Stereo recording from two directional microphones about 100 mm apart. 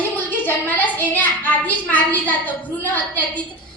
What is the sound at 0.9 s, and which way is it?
A woman's voice, 20° left (ahead or behind).